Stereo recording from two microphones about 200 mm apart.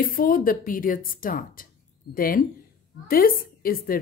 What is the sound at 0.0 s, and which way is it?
A woman's voice, 45° left (ahead or behind).